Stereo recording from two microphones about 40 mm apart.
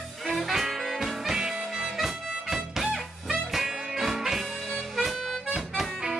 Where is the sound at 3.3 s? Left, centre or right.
Centre.